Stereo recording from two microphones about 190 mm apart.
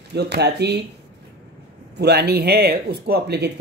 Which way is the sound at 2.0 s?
55° right (ahead or behind).